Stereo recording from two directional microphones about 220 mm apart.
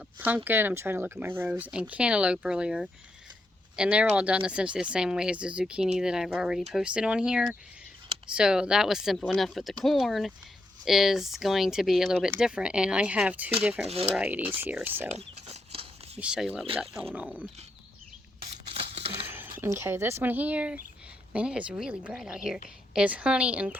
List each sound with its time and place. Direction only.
0.2 s speech: 10° right (ahead or behind)
13.8 s speech: 25° right (ahead or behind)
14.2 s speech: 5° right (ahead or behind)
15.1 s a sound: 30° right (ahead or behind)
16.2 s speech: 5° right (ahead or behind)
18.7 s a sound: 25° right (ahead or behind)
19.3 s speech: 10° right (ahead or behind)